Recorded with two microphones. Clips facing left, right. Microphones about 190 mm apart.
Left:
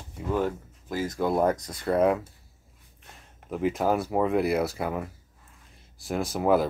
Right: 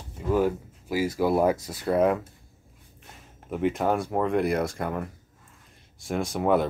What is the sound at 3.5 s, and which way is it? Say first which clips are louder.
Speech: even; centre (ahead or behind).